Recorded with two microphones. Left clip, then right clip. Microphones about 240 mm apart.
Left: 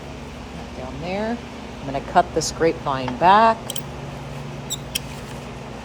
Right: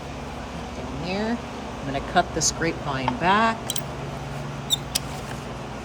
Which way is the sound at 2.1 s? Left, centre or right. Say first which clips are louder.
Left 4 dB; centre.